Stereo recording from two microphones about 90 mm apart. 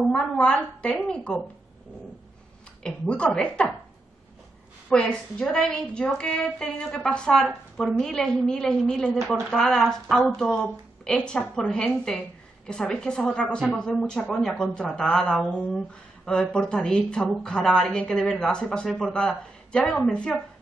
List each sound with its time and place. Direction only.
0.1 s speech: 10° left (ahead or behind)
2.8 s speech: 10° left (ahead or behind)
4.8 s speech: 10° left (ahead or behind)